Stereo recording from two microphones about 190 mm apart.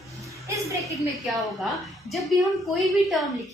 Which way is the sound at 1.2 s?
Centre (ahead or behind).